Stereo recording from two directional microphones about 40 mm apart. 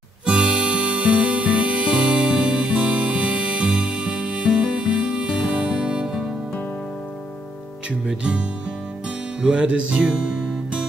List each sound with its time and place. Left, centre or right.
0.3 s music: right
5.8 s music: centre
8.2 s music: right